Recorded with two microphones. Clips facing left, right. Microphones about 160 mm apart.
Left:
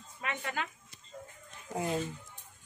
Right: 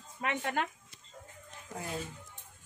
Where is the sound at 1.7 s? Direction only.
20° left (ahead or behind).